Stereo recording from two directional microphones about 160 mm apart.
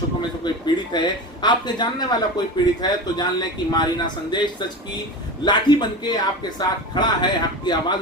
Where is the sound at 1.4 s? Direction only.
30° left (ahead or behind).